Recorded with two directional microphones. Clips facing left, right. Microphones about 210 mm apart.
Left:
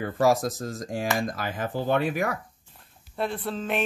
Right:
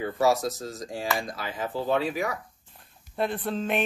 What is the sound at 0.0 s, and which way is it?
Speech, 50° left (ahead or behind).